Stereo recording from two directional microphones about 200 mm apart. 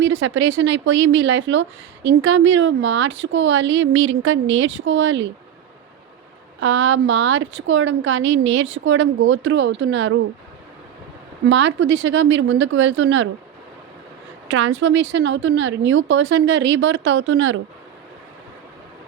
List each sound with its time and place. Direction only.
0.0 s a woman's voice: 70° right (ahead or behind)
2.0 s a woman's voice: 75° right (ahead or behind)
6.6 s a woman's voice: 75° right (ahead or behind)
11.4 s a woman's voice: 65° right (ahead or behind)
14.5 s a woman's voice: 70° right (ahead or behind)